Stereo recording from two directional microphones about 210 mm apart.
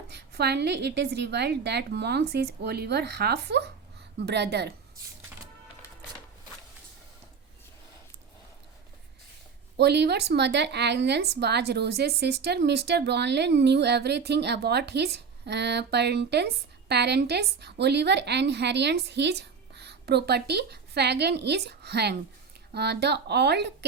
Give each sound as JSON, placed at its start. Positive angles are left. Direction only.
{"t": 0.1, "sound": "speech", "side_deg": -50}
{"t": 9.7, "sound": "speech", "side_deg": -55}